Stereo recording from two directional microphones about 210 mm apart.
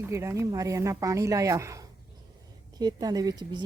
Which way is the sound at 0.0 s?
15° right (ahead or behind).